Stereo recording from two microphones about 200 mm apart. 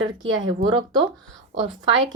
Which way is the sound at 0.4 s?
20° right (ahead or behind).